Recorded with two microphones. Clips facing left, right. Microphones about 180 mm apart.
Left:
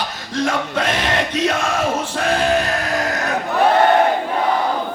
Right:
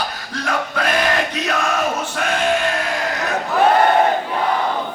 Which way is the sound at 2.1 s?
30° left (ahead or behind).